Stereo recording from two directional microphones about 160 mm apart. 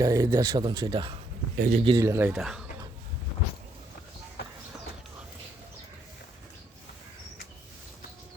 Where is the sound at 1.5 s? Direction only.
75° right (ahead or behind).